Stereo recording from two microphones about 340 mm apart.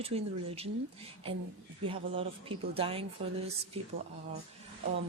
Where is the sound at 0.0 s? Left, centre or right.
Centre.